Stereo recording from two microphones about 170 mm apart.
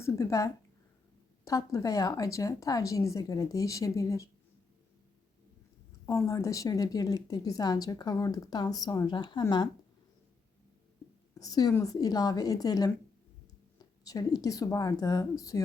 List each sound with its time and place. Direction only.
0.0 s a woman's voice: 20° left (ahead or behind)
6.1 s a woman's voice: 20° left (ahead or behind)
11.3 s a woman's voice: 20° left (ahead or behind)